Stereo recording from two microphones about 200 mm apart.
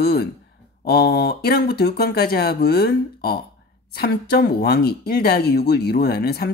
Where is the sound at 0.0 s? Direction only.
50° left (ahead or behind).